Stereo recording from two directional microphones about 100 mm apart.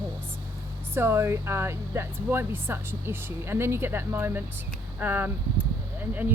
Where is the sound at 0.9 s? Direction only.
25° right (ahead or behind).